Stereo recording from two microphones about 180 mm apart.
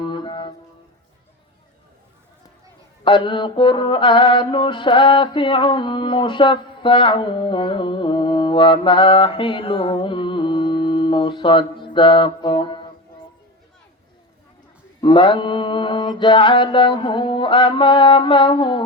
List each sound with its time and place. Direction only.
0.0 s music: 25° left (ahead or behind)
3.0 s mantra: 25° left (ahead or behind)
15.0 s mantra: 25° left (ahead or behind)